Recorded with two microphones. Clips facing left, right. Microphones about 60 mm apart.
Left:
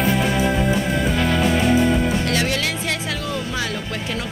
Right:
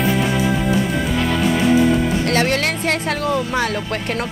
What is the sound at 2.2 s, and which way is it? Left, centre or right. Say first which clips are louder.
A woman's voice: right 4 dB; right.